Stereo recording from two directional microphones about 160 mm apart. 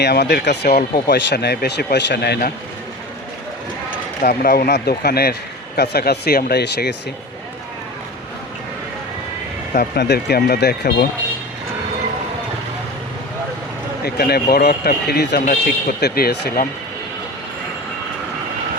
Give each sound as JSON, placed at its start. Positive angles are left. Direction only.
{"t": 0.0, "sound": "speech", "side_deg": 90}
{"t": 4.2, "sound": "a man's voice", "side_deg": 70}
{"t": 9.7, "sound": "a man's voice", "side_deg": 85}
{"t": 14.0, "sound": "a man's voice", "side_deg": 80}